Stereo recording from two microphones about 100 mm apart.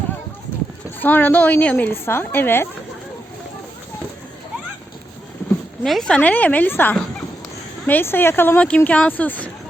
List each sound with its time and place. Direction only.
0.9 s a woman's voice: 20° left (ahead or behind)
5.8 s speech: 5° left (ahead or behind)